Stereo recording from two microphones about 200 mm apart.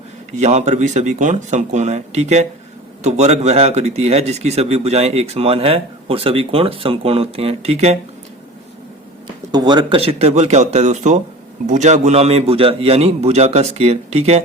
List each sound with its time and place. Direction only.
0.3 s speech: 35° right (ahead or behind)
9.2 s speech: 20° right (ahead or behind)